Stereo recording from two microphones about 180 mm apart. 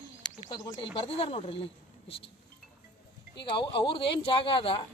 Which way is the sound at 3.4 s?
25° left (ahead or behind).